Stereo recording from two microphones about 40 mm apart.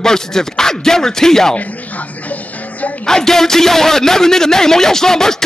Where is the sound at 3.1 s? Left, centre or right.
Centre.